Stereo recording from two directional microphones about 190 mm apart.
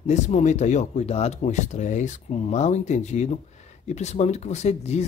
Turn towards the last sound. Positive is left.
turn(degrees=35)  # may be behind; listen again after turning